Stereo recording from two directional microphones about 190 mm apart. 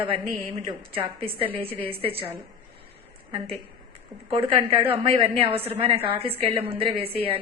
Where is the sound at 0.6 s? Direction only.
20° right (ahead or behind).